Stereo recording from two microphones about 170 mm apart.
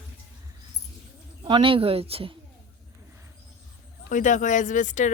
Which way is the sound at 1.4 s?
30° right (ahead or behind).